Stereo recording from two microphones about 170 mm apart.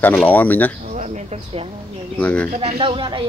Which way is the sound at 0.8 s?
40° right (ahead or behind).